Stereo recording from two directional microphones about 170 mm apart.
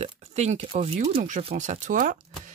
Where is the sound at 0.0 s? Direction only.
40° right (ahead or behind).